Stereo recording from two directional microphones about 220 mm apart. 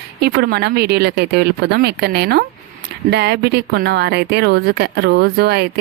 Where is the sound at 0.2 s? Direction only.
50° right (ahead or behind).